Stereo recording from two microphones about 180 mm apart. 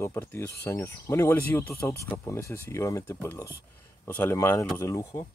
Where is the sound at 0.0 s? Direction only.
15° left (ahead or behind).